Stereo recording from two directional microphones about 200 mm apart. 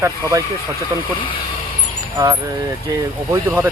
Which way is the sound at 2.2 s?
15° right (ahead or behind).